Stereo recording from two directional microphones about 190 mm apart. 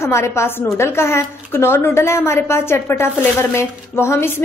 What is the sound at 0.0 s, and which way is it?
A woman's voice, 15° left (ahead or behind).